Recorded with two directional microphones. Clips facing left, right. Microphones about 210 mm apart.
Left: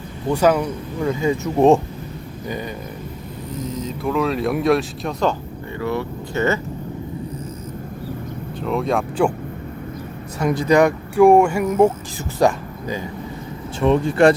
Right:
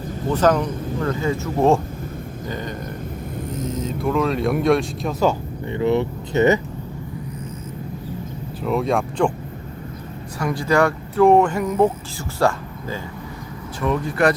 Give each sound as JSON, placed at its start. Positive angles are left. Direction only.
{"t": 0.3, "sound": "speech", "side_deg": 10}
{"t": 3.6, "sound": "speech", "side_deg": 0}
{"t": 5.7, "sound": "speech", "side_deg": -20}
{"t": 8.6, "sound": "speech", "side_deg": 0}
{"t": 10.4, "sound": "speech", "side_deg": 20}
{"t": 13.8, "sound": "speech", "side_deg": 25}